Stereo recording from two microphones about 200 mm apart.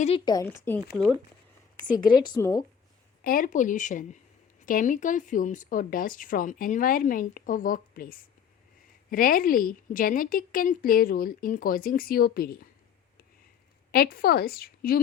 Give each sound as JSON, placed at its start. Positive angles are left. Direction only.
{"t": 0.3, "sound": "speech", "side_deg": 15}
{"t": 2.0, "sound": "a woman's voice", "side_deg": 20}
{"t": 3.2, "sound": "speech", "side_deg": 45}
{"t": 13.9, "sound": "speech", "side_deg": 50}